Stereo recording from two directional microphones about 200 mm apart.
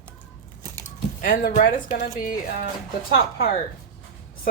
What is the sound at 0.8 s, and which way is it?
Speech, 45° left (ahead or behind).